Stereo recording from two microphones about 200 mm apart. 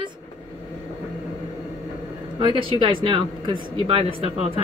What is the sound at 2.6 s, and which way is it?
Speech, 25° right (ahead or behind).